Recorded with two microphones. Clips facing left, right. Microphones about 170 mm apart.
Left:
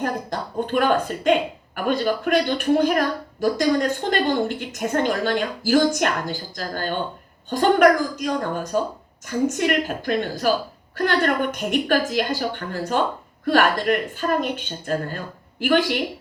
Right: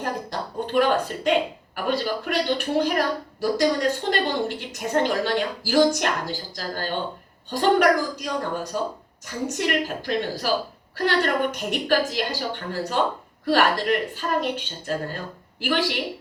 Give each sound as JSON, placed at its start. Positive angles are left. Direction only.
{"t": 0.0, "sound": "speech", "side_deg": 50}
{"t": 11.5, "sound": "speech", "side_deg": 50}